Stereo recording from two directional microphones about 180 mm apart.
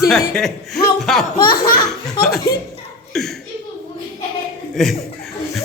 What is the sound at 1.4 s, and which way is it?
Laughter, 55° left (ahead or behind).